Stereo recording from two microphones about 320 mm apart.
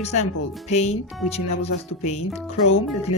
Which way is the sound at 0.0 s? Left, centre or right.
Centre.